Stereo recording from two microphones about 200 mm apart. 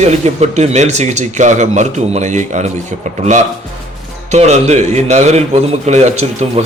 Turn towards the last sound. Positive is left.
turn(degrees=-30)  # may be behind; listen again after turning